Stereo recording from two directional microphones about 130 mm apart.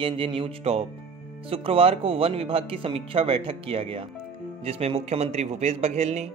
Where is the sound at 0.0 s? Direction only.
40° right (ahead or behind).